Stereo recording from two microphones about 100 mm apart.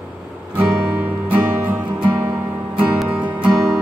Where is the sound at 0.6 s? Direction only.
10° right (ahead or behind).